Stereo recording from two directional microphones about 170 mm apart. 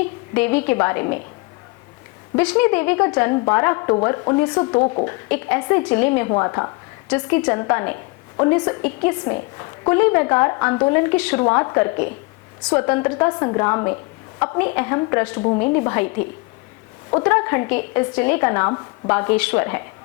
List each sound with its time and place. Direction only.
0.3 s a woman's voice: 10° left (ahead or behind)
2.4 s a woman's voice: 10° left (ahead or behind); by 5.0 s 25° left (ahead or behind)
5.0 s a woman's voice: 15° left (ahead or behind)
15.4 s a woman's voice: 25° left (ahead or behind)
15.6 s a woman's voice: 15° left (ahead or behind)
17.2 s a woman's voice: 15° left (ahead or behind)